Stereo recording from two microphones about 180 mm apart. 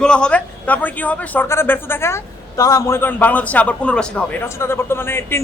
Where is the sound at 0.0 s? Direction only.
5° left (ahead or behind).